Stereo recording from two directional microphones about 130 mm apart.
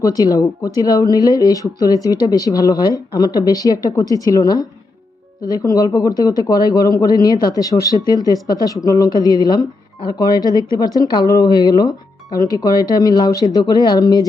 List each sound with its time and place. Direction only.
0.0 s speech: 30° left (ahead or behind)